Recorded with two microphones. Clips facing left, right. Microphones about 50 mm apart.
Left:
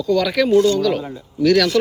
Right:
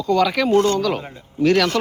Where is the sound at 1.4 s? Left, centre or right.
Right.